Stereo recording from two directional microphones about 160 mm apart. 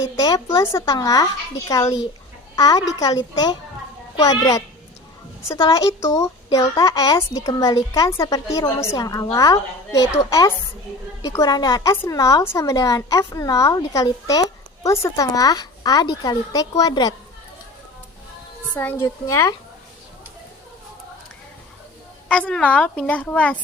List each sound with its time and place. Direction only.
0.0 s a child's voice: 20° left (ahead or behind)
18.8 s a woman's voice: 10° left (ahead or behind)
22.3 s a woman's voice: 5° left (ahead or behind)